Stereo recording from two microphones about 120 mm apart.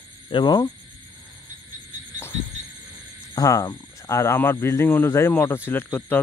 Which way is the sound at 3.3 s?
30° left (ahead or behind).